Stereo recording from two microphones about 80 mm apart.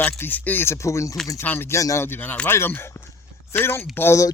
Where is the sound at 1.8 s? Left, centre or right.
Left.